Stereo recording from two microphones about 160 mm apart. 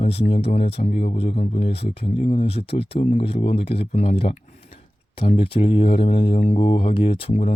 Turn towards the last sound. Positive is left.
turn(degrees=35)  # may be behind; listen again after turning